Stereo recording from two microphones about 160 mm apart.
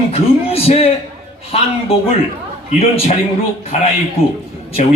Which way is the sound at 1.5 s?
40° left (ahead or behind).